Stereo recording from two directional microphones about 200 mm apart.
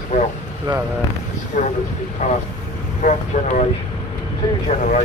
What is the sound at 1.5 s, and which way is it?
Speech, 40° left (ahead or behind).